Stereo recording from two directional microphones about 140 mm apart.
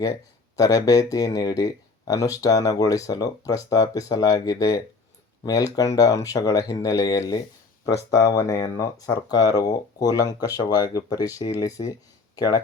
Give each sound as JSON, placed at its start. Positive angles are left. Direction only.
{"t": 0.0, "sound": "speech", "side_deg": 25}